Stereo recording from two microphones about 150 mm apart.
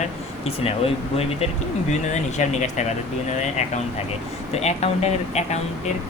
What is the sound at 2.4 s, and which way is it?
Speech, 50° left (ahead or behind).